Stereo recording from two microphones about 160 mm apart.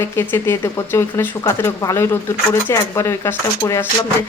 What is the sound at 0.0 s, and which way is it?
Speech, 15° left (ahead or behind).